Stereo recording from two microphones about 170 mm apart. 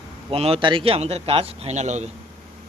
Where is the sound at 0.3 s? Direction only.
35° right (ahead or behind).